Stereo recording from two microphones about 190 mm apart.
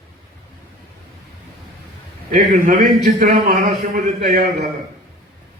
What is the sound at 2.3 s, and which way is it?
Speech, 45° right (ahead or behind).